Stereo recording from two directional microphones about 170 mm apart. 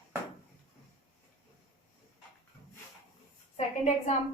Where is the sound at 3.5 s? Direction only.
40° left (ahead or behind).